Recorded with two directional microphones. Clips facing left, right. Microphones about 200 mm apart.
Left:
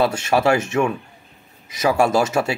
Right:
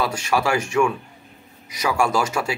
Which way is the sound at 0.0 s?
25° left (ahead or behind).